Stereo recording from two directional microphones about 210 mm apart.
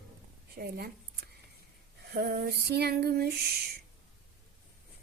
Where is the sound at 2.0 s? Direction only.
50° right (ahead or behind).